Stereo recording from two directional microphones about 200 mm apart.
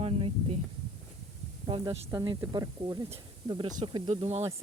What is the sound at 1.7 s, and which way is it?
Speech, 25° right (ahead or behind).